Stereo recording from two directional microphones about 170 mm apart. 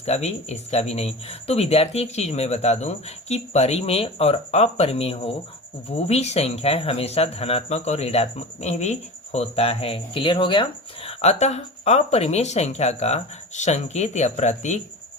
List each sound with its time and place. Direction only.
0.0 s speech: 40° left (ahead or behind)